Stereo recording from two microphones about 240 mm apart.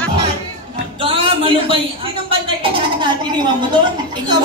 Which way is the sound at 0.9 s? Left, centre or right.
Right.